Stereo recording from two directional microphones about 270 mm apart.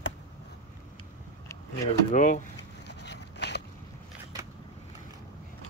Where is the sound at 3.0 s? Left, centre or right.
Left.